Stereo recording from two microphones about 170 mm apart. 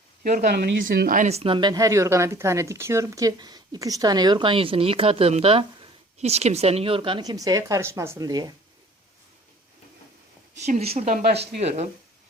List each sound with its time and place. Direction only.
0.2 s speech: 55° right (ahead or behind); by 0.8 s 75° right (ahead or behind)
0.9 s speech: 55° right (ahead or behind); by 8.5 s 25° right (ahead or behind)
10.7 s speech: 40° right (ahead or behind)
11.3 s speech: 75° right (ahead or behind)